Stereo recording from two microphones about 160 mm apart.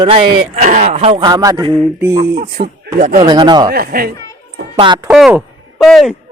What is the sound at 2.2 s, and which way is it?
Speech, 65° right (ahead or behind).